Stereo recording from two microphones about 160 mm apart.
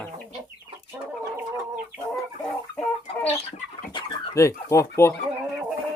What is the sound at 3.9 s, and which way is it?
Bird, 30° left (ahead or behind).